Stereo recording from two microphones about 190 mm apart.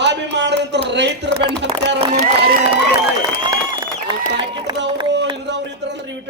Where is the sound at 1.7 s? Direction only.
30° right (ahead or behind).